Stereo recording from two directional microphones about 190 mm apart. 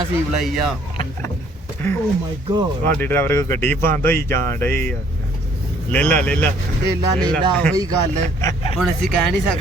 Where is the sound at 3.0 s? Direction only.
10° left (ahead or behind).